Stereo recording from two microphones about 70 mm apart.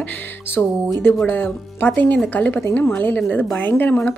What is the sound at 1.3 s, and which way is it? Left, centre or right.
A woman's voice, left.